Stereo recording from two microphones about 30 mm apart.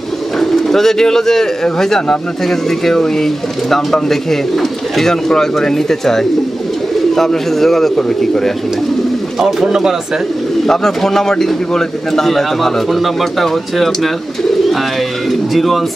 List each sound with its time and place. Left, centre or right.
0.4 s a man's voice: centre
9.7 s speech: centre
10.7 s a man's voice: centre
15.5 s speech: centre